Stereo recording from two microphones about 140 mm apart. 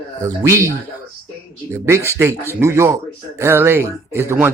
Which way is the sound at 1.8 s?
20° right (ahead or behind).